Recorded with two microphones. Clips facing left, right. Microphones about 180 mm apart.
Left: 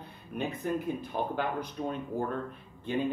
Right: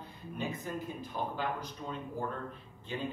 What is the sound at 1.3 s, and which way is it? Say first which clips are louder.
Speech: left 4 dB; 60° left (ahead or behind).